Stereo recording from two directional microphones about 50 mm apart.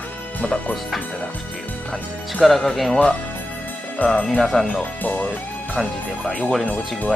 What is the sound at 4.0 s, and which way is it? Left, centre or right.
Speech, left.